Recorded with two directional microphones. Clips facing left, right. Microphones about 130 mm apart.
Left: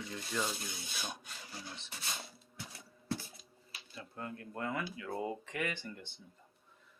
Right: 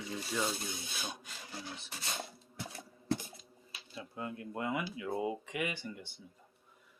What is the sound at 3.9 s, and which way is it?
Speech, 15° right (ahead or behind).